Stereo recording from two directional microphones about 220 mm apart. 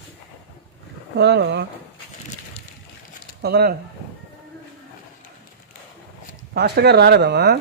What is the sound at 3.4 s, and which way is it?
Speech, 45° right (ahead or behind).